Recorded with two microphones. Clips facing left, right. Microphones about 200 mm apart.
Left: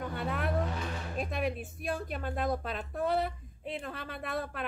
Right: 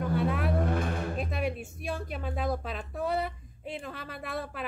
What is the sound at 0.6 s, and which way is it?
Music, 55° right (ahead or behind).